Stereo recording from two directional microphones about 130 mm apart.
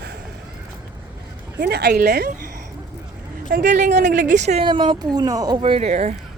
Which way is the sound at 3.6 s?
70° right (ahead or behind).